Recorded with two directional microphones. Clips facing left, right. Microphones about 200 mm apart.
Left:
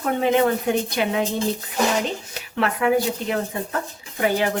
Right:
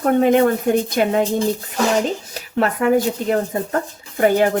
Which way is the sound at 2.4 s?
40° right (ahead or behind).